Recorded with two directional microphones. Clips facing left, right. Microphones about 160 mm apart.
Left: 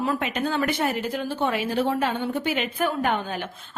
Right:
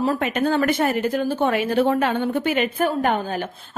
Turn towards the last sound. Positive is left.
turn(degrees=-45)  # may be behind; listen again after turning